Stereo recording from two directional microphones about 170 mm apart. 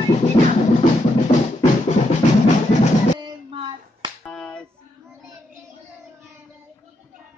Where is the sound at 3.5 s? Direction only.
30° right (ahead or behind).